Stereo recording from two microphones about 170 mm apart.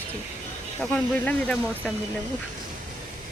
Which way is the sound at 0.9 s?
5° left (ahead or behind).